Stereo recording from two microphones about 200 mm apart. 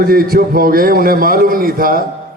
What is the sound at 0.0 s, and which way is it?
A man's voice, 45° right (ahead or behind).